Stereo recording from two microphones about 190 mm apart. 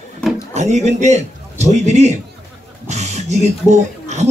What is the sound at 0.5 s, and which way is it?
A man's voice, 35° right (ahead or behind).